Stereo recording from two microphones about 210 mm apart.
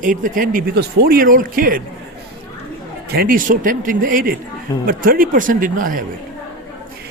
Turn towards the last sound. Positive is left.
turn(degrees=-40)  # may be behind; listen again after turning